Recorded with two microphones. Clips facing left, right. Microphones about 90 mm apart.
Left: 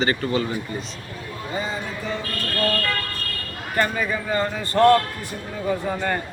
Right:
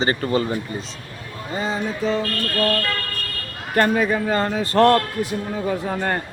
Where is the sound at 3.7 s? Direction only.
55° right (ahead or behind).